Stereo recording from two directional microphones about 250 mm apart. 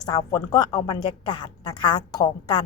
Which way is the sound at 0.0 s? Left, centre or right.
Centre.